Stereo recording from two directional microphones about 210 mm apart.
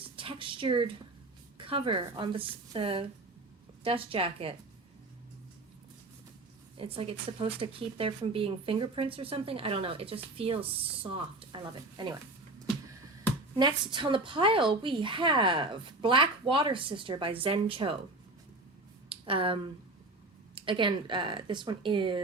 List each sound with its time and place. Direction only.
0.0 s a sound: 25° right (ahead or behind)
1.5 s speech: 25° right (ahead or behind)
6.7 s speech: 25° right (ahead or behind)
13.6 s speech: 20° right (ahead or behind)
19.0 s a sound: 25° right (ahead or behind)
20.6 s speech: 25° right (ahead or behind)